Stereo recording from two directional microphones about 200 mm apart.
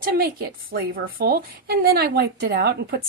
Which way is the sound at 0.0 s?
50° right (ahead or behind).